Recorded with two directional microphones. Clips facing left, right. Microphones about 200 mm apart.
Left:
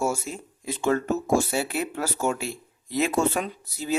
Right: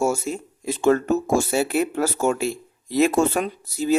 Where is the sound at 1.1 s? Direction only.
45° right (ahead or behind).